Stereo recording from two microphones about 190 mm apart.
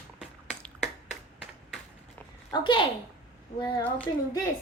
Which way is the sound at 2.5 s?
25° left (ahead or behind).